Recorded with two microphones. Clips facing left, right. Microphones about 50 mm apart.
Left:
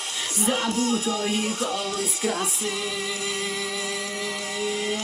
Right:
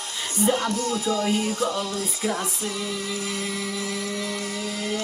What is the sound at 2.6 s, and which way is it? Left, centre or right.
Music, left.